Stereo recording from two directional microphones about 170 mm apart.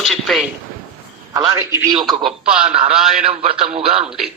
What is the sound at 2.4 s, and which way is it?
Speech, 5° right (ahead or behind).